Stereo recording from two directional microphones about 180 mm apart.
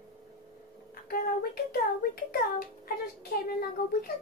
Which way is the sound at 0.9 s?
55° left (ahead or behind).